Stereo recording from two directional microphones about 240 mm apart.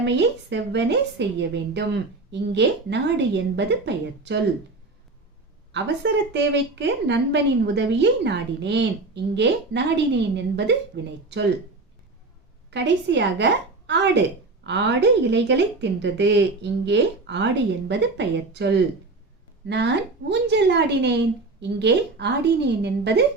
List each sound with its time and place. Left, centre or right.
0.0 s a woman's voice: right
5.7 s a woman's voice: right
12.7 s a woman's voice: right